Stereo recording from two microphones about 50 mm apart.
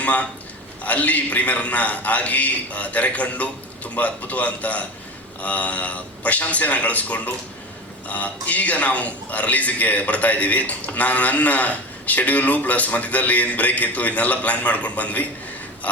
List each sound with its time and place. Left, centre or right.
0.0 s a man's voice: left